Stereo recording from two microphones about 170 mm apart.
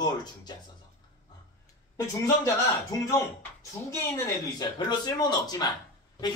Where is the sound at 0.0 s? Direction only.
25° left (ahead or behind).